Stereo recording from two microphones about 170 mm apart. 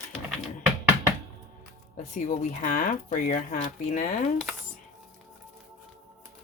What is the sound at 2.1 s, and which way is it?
Speech, 45° left (ahead or behind).